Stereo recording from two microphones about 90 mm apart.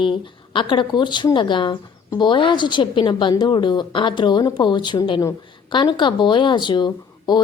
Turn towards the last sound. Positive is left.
turn(degrees=55)  # may be behind; listen again after turning